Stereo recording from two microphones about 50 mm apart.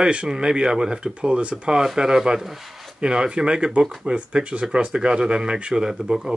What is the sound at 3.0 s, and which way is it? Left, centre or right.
Speech, centre.